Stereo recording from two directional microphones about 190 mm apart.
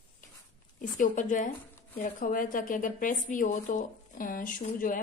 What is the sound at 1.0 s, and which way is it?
A woman's voice, 45° left (ahead or behind).